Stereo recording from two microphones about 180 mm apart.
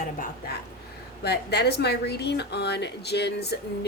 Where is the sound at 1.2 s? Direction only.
65° left (ahead or behind).